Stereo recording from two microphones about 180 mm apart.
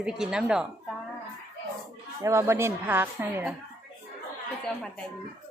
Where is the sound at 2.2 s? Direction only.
15° right (ahead or behind).